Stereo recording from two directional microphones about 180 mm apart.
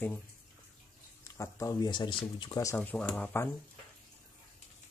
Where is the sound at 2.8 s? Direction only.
10° left (ahead or behind).